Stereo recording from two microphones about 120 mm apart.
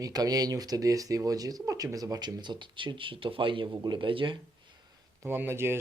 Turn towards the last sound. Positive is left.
turn(degrees=-20)  # may be behind; listen again after turning